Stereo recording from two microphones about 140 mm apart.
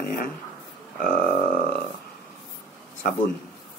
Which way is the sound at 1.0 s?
75° left (ahead or behind).